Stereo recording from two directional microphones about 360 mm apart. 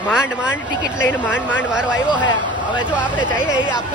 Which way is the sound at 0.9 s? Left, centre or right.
Centre.